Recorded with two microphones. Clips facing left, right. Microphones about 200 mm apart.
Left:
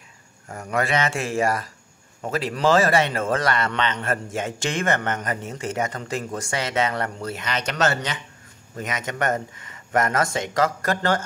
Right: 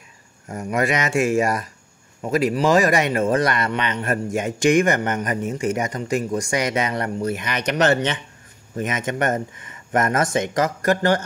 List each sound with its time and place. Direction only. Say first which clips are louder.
0.5 s a man's voice: right 2 dB; 20° right (ahead or behind)